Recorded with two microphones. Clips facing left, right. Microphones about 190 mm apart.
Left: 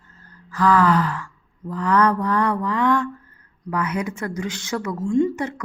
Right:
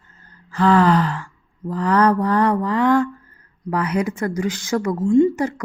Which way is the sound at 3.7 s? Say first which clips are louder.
Right 4 dB; 35° right (ahead or behind).